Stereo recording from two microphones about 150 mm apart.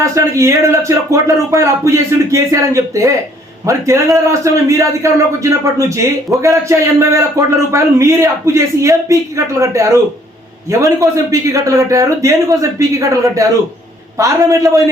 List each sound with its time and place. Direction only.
0.0 s a man's voice: 20° right (ahead or behind)